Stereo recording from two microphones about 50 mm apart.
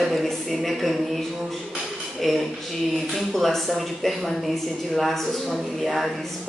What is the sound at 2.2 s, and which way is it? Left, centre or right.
Speech, centre.